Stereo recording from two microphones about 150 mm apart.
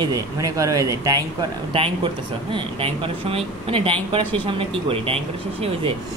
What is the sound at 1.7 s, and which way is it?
Speech, 35° right (ahead or behind).